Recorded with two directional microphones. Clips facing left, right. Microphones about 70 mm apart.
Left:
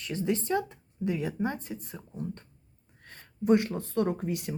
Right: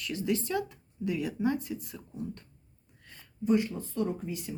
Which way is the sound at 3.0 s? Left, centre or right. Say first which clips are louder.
Left 4 dB; left.